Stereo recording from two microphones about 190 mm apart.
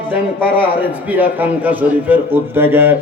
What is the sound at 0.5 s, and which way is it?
A man's voice, 10° right (ahead or behind).